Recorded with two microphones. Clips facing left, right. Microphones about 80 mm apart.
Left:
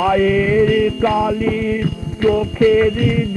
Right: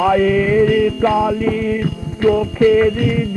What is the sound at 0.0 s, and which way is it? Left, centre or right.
Music, centre.